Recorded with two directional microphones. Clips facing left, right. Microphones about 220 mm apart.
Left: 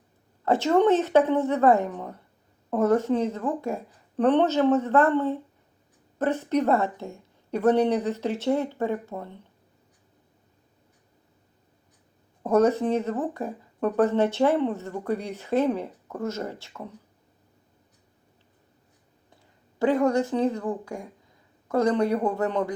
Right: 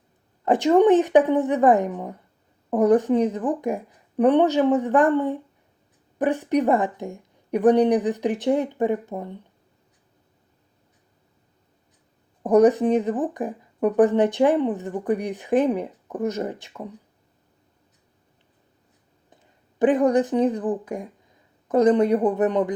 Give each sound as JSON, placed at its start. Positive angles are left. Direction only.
{"t": 0.4, "sound": "speech", "side_deg": -15}
{"t": 12.4, "sound": "speech", "side_deg": -15}
{"t": 19.8, "sound": "speech", "side_deg": -20}